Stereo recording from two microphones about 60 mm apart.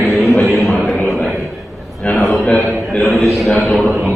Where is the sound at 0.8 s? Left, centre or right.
Centre.